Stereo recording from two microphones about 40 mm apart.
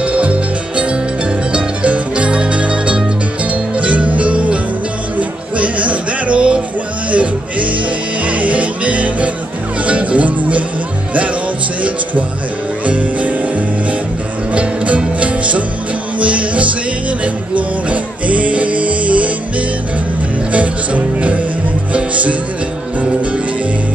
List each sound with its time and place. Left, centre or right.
0.0 s music: right
12.8 s music: right
14.5 s music: right
20.5 s music: right